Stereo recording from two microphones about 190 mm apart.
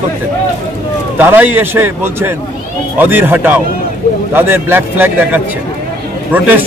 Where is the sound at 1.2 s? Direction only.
10° right (ahead or behind).